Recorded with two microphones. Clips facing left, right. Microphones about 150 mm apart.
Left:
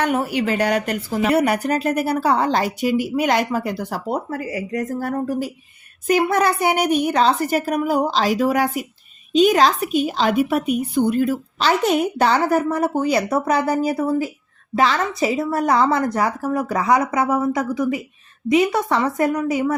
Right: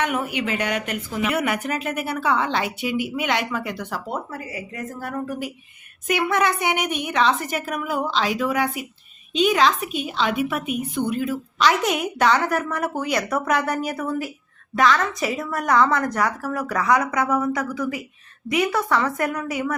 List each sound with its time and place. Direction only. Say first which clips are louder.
0.0 s a woman's voice: left 4 dB; 35° left (ahead or behind)